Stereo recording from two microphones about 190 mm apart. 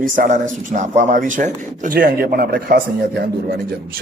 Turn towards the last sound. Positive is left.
turn(degrees=-50)  # may be behind; listen again after turning